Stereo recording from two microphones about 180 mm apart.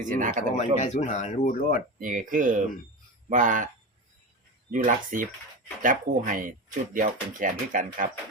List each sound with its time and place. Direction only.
0.0 s speech: 45° right (ahead or behind)
0.5 s speech: 40° left (ahead or behind)
2.0 s speech: 50° right (ahead or behind)
4.7 s speech: 45° right (ahead or behind)